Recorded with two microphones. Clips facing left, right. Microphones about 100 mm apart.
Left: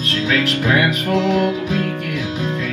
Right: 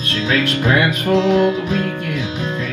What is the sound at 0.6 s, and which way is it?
Music, 30° right (ahead or behind).